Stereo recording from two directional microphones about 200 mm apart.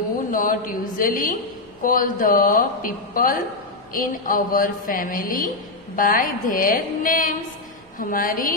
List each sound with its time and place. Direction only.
0.3 s a woman's voice: 45° left (ahead or behind)